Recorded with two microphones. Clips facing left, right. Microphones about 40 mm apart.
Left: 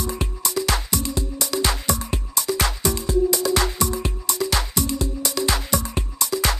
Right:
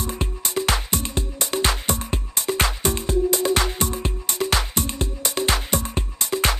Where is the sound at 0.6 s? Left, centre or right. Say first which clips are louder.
Right 1 dB; right.